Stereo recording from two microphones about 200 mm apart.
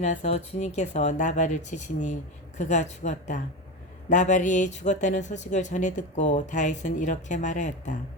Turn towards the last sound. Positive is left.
turn(degrees=40)  # may be behind; listen again after turning